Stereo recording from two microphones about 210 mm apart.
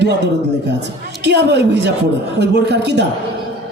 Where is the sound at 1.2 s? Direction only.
55° right (ahead or behind).